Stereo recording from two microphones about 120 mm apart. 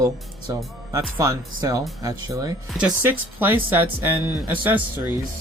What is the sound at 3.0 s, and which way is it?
Speech, 15° right (ahead or behind).